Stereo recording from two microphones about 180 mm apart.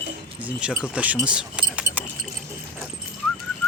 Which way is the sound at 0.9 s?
10° right (ahead or behind).